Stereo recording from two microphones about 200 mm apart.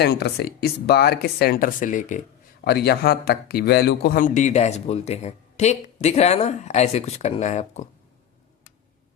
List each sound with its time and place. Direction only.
0.0 s speech: 55° left (ahead or behind); by 2.2 s 40° left (ahead or behind)
2.6 s a man's voice: 55° left (ahead or behind); by 7.9 s 35° left (ahead or behind)